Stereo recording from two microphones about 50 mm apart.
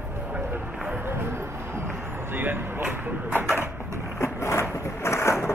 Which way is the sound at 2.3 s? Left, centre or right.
Right.